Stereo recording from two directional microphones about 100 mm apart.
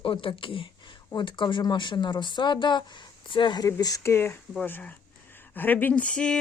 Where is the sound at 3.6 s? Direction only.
35° left (ahead or behind).